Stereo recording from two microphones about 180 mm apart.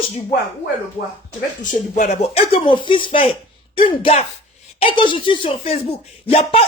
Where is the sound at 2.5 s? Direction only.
25° left (ahead or behind).